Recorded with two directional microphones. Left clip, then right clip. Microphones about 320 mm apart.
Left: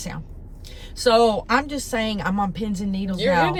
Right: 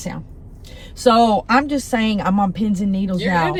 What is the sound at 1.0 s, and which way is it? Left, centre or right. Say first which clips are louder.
Speech: right 3 dB; centre.